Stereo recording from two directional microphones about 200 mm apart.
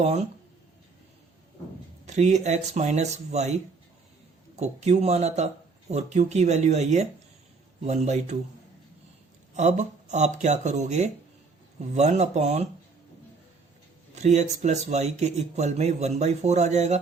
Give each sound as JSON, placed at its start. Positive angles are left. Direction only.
{"t": 0.0, "sound": "speech", "side_deg": -35}
{"t": 2.0, "sound": "speech", "side_deg": -35}
{"t": 9.6, "sound": "speech", "side_deg": -35}
{"t": 14.2, "sound": "speech", "side_deg": -35}